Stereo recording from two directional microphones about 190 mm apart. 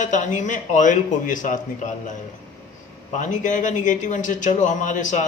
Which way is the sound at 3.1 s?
40° left (ahead or behind).